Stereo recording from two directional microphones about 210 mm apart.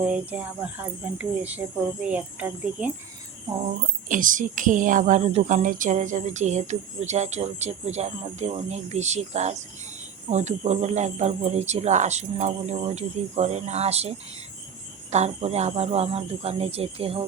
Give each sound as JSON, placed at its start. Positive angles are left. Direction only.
{"t": 0.0, "sound": "speech", "side_deg": -5}
{"t": 4.1, "sound": "a woman's voice", "side_deg": -40}
{"t": 15.1, "sound": "speech", "side_deg": -30}